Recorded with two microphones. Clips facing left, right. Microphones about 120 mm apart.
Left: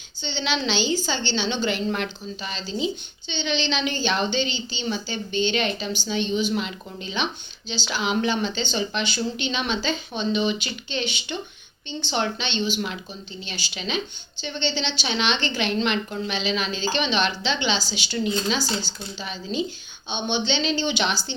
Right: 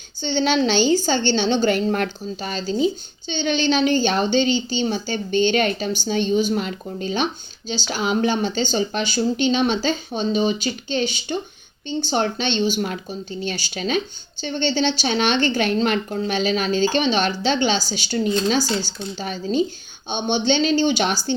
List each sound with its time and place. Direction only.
0.2 s a woman's voice: 45° right (ahead or behind)